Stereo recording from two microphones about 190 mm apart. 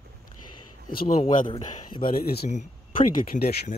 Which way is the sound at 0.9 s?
50° left (ahead or behind).